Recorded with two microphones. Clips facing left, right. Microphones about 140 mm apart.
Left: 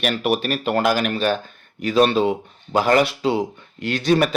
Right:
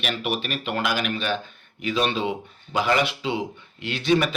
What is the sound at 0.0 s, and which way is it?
Speech, 45° left (ahead or behind).